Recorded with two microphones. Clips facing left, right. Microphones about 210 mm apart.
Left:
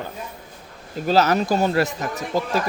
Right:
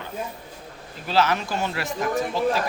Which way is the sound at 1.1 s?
40° left (ahead or behind).